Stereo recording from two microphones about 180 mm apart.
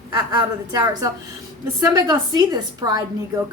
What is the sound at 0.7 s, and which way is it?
A woman's voice, 20° right (ahead or behind).